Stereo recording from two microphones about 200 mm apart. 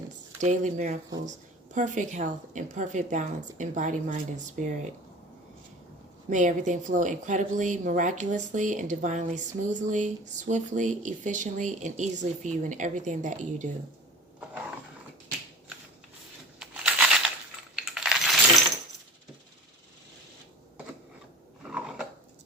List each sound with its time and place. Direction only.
0.4 s speech: 40° right (ahead or behind)
6.3 s speech: 40° right (ahead or behind)
16.6 s crushing: 5° right (ahead or behind)
17.7 s coin: centre (ahead or behind)
21.7 s a sound: 5° right (ahead or behind)